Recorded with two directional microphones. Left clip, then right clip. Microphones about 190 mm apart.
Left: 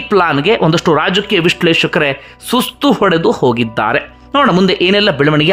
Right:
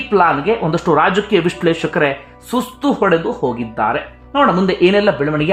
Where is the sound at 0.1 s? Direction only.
30° left (ahead or behind).